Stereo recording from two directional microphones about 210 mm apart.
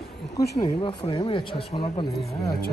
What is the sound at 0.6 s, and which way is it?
Speech, 20° left (ahead or behind).